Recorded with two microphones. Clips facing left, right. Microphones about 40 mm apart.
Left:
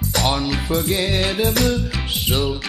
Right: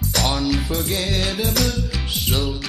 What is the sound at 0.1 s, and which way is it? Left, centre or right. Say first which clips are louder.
Music: left 1 dB; centre.